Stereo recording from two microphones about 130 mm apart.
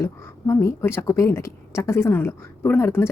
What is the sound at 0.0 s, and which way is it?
A woman's voice, 25° left (ahead or behind).